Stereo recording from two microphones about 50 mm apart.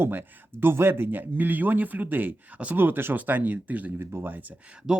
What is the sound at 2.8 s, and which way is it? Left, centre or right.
Speech, right.